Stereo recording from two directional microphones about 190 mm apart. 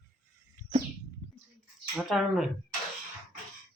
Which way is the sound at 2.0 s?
Centre (ahead or behind).